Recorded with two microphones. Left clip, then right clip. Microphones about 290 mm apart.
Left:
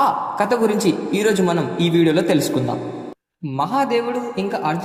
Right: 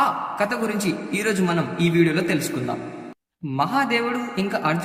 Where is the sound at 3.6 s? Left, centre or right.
Centre.